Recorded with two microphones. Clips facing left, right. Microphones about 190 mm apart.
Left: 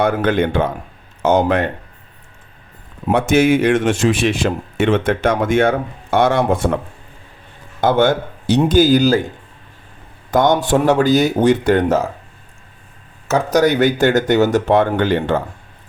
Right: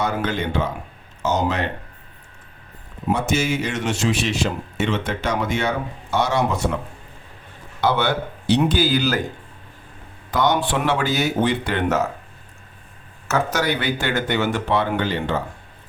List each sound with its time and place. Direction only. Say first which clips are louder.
0.0 s speech: left 7 dB; 55° left (ahead or behind)
3.1 s speech: left 8 dB; 60° left (ahead or behind)
7.8 s speech: left 6 dB; 45° left (ahead or behind)
10.3 s speech: left 6 dB; 45° left (ahead or behind)
13.2 s speech: left 7 dB; 35° left (ahead or behind)